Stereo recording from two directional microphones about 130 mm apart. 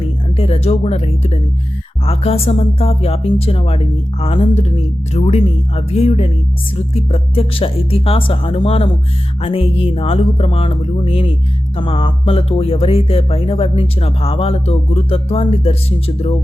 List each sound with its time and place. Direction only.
0.3 s speech: 50° left (ahead or behind)